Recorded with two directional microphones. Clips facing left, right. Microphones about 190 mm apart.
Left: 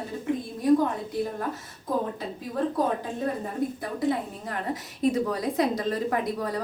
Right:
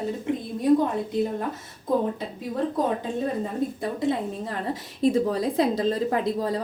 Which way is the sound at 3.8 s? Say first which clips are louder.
Right 2 dB; 25° right (ahead or behind).